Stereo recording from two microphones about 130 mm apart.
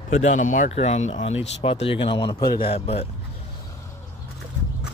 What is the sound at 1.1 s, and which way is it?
Speech, 50° left (ahead or behind).